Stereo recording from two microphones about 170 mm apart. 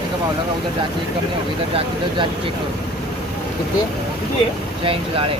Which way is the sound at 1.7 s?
30° right (ahead or behind).